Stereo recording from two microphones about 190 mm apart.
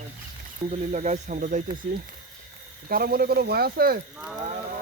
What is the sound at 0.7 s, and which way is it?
Speech, 40° right (ahead or behind).